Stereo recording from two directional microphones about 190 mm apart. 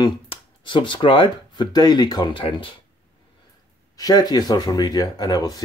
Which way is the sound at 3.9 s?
20° left (ahead or behind).